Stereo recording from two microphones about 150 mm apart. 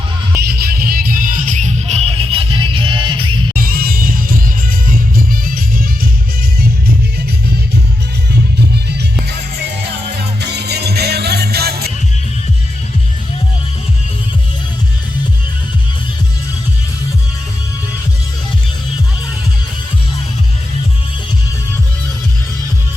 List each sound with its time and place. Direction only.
0.4 s music: 90° right; by 3.4 s 35° right (ahead or behind)
3.5 s music: 70° right (ahead or behind)
10.4 s music: 90° right